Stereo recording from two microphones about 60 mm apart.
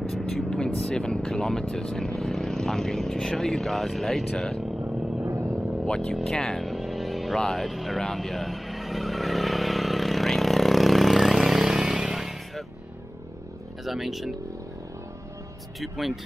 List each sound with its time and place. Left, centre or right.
0.5 s speech: centre
5.2 s vehicle: right
5.9 s speech: centre
6.6 s vehicle: centre
7.3 s speech: centre
7.6 s vehicle: centre
13.8 s speech: centre
15.8 s speech: centre